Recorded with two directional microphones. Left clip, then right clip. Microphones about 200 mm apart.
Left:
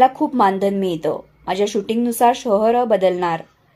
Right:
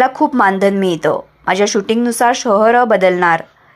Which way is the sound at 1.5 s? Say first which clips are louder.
Right 6 dB; 5° right (ahead or behind).